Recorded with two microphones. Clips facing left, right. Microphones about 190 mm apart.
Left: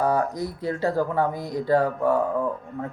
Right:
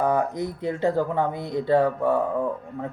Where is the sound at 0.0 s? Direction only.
20° right (ahead or behind).